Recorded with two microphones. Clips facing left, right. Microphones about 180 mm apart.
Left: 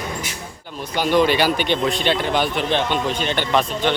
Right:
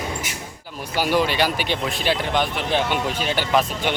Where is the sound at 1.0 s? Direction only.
5° right (ahead or behind).